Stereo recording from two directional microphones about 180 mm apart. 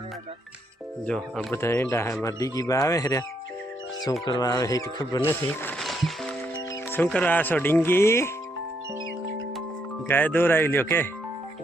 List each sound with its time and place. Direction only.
1.0 s speech: 5° left (ahead or behind)
4.3 s speech: 20° left (ahead or behind)
5.8 s music: centre (ahead or behind)
6.9 s speech: 10° left (ahead or behind)
10.1 s speech: 10° left (ahead or behind)